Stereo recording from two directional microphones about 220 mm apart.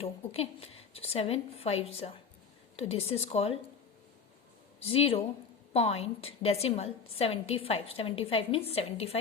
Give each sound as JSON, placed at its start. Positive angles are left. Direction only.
{"t": 0.0, "sound": "a woman's voice", "side_deg": 25}
{"t": 4.8, "sound": "a woman's voice", "side_deg": 25}